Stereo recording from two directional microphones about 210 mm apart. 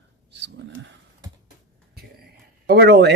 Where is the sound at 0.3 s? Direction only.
55° right (ahead or behind).